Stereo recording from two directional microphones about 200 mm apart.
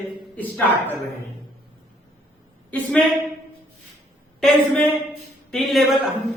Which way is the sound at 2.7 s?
5° left (ahead or behind).